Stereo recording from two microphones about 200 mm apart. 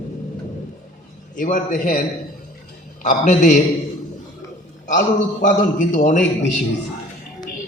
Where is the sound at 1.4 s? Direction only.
40° left (ahead or behind).